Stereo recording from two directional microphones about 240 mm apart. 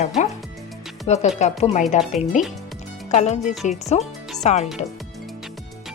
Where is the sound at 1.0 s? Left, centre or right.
Left.